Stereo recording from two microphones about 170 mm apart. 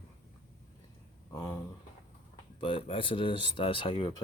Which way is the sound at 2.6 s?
30° left (ahead or behind).